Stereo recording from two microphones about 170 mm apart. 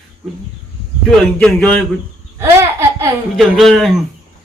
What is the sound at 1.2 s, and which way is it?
Speech, 5° left (ahead or behind).